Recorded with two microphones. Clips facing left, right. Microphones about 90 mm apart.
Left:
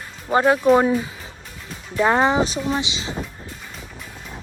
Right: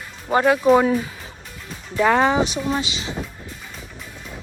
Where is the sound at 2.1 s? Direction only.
30° left (ahead or behind).